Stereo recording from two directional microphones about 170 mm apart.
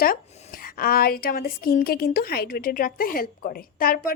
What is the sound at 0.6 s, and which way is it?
A woman's voice, 60° left (ahead or behind).